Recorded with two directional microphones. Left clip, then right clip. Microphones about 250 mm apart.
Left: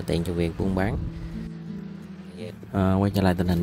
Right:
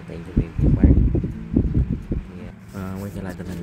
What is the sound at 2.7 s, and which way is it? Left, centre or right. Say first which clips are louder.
Speech: left 10 dB; left.